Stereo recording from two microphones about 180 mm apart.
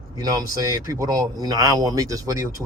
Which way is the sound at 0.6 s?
15° right (ahead or behind).